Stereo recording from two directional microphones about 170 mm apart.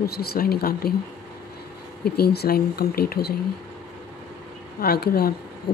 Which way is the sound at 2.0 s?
65° left (ahead or behind).